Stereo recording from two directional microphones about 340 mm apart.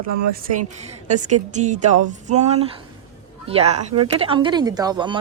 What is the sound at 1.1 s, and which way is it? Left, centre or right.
A woman's voice, right.